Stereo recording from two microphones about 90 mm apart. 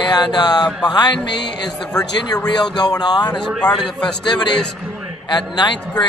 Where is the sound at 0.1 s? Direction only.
55° left (ahead or behind).